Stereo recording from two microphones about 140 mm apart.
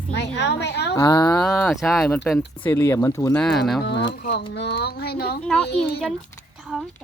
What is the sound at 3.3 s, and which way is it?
Speech, 5° left (ahead or behind).